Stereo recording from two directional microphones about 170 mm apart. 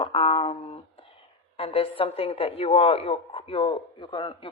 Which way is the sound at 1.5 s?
35° left (ahead or behind).